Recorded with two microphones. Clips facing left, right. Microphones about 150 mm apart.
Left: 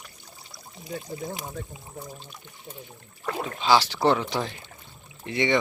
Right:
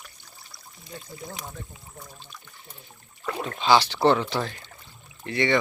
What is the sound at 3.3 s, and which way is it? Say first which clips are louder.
Speech: right 1 dB; 5° left (ahead or behind).